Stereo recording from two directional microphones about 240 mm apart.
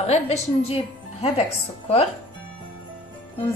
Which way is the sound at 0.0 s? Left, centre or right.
Left.